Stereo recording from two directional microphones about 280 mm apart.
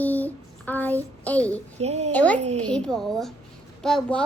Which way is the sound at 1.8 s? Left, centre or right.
Right.